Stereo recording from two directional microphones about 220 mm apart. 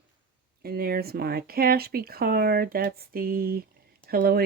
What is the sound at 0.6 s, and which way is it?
Speech, 45° right (ahead or behind).